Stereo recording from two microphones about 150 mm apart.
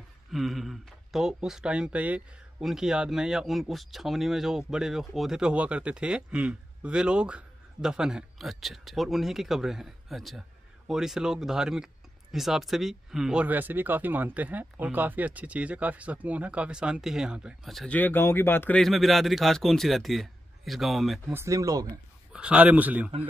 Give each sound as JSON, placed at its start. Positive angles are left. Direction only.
{"t": 0.3, "sound": "speech", "side_deg": 0}
{"t": 17.9, "sound": "speech", "side_deg": 15}
{"t": 18.8, "sound": "speech", "side_deg": 0}
{"t": 21.3, "sound": "speech", "side_deg": -20}
{"t": 22.3, "sound": "speech", "side_deg": -5}